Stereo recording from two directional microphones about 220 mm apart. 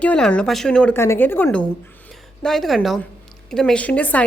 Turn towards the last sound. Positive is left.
turn(degrees=5)  # may be behind; listen again after turning